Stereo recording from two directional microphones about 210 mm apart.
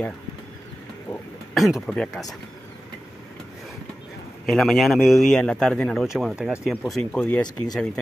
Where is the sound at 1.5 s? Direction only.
Centre (ahead or behind).